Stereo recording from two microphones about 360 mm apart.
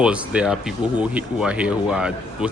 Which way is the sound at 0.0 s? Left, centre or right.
Centre.